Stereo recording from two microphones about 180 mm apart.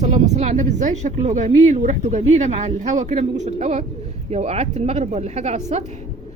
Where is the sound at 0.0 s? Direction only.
40° right (ahead or behind).